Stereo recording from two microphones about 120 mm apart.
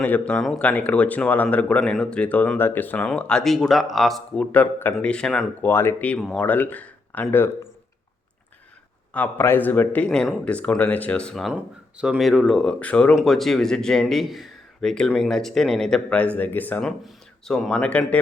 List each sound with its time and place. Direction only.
0.0 s speech: 10° left (ahead or behind)
4.5 s speech: 15° left (ahead or behind)
5.6 s speech: 20° left (ahead or behind)
9.1 s speech: 15° left (ahead or behind)
11.5 s speech: 10° right (ahead or behind); by 16.8 s 15° left (ahead or behind)
16.8 s speech: 5° left (ahead or behind)